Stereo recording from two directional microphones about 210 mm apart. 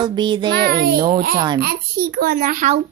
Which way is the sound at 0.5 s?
50° right (ahead or behind).